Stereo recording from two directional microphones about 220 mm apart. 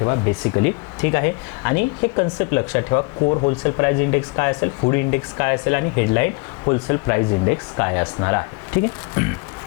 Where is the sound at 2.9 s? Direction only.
25° left (ahead or behind).